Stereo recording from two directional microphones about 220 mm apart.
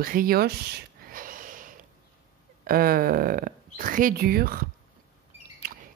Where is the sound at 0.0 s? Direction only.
40° right (ahead or behind).